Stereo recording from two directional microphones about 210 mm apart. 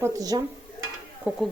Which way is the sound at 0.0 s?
15° right (ahead or behind).